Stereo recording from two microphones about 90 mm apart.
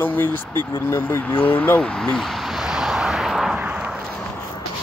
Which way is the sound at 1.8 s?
10° left (ahead or behind).